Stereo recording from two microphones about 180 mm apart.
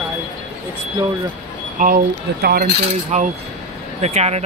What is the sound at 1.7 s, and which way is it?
Speech, 50° right (ahead or behind).